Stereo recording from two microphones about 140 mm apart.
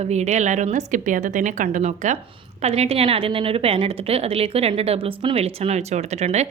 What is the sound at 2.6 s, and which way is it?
A woman's voice, 50° right (ahead or behind).